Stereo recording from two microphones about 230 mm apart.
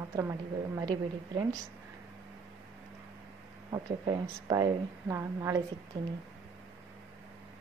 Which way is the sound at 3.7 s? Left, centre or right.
Centre.